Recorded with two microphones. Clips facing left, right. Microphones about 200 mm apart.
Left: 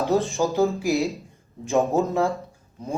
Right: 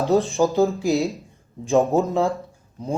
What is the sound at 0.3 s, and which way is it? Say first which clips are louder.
Speech: right 3 dB; 15° right (ahead or behind).